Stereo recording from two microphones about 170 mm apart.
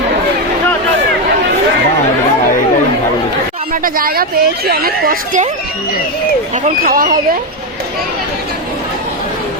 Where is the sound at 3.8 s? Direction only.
60° right (ahead or behind).